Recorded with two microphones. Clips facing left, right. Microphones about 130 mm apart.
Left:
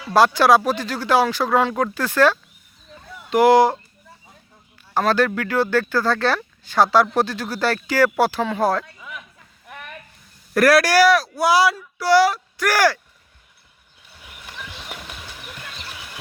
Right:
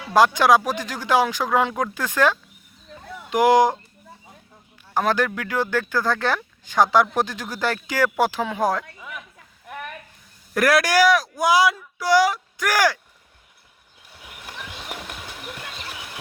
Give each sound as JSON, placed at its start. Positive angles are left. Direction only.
{"t": 0.0, "sound": "speech", "side_deg": -15}
{"t": 4.9, "sound": "speech", "side_deg": -15}
{"t": 10.5, "sound": "speech", "side_deg": -15}
{"t": 14.2, "sound": "a sound", "side_deg": -10}
{"t": 15.3, "sound": "music", "side_deg": -10}